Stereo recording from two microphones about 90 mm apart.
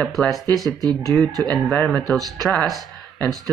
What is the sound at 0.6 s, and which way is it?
Speech, 45° right (ahead or behind).